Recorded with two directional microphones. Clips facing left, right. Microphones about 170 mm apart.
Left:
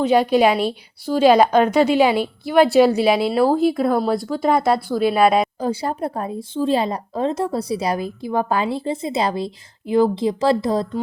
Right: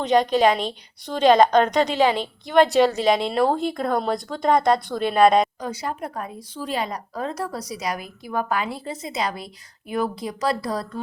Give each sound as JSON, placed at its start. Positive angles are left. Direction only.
{"t": 0.0, "sound": "a woman's voice", "side_deg": 10}
{"t": 5.5, "sound": "speech", "side_deg": 30}